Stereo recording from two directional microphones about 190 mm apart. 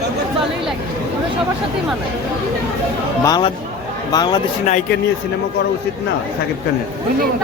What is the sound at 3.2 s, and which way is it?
Speech, 20° left (ahead or behind).